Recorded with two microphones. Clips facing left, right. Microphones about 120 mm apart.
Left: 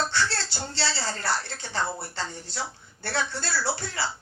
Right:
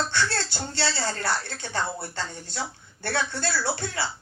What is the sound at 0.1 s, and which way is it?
A woman's voice, 50° right (ahead or behind).